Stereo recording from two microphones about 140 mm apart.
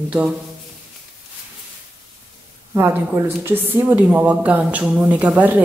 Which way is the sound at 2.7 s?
15° right (ahead or behind).